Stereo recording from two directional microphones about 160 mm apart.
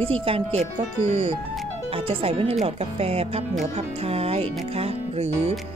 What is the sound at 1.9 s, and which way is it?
Speech, 35° right (ahead or behind).